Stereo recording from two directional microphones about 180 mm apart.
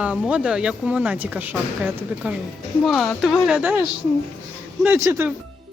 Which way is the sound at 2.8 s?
Centre (ahead or behind).